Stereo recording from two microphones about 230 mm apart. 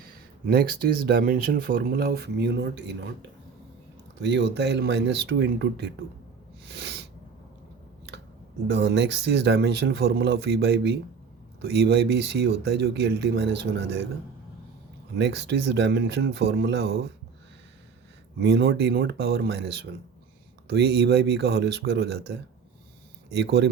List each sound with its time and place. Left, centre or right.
0.0 s speech: right
6.7 s sneeze: right
8.6 s speech: right
15.2 s speech: right
18.3 s speech: right